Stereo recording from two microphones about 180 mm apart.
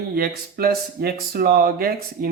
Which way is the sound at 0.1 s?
55° right (ahead or behind).